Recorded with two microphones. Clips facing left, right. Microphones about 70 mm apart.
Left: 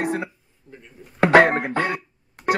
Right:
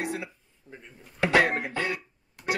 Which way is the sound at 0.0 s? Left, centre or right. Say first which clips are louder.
Left 7 dB; left.